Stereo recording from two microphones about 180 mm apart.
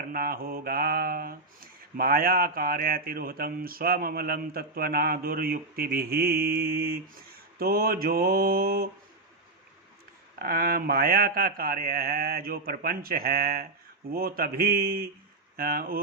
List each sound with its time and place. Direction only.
0.1 s mantra: 55° right (ahead or behind)
10.3 s mantra: 55° right (ahead or behind)